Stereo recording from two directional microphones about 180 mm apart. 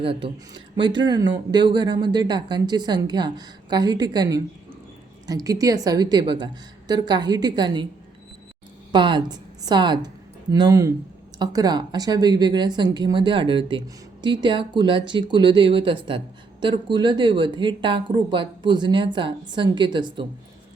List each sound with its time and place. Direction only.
0.0 s a woman's voice: 30° right (ahead or behind)
8.9 s a woman's voice: 25° right (ahead or behind)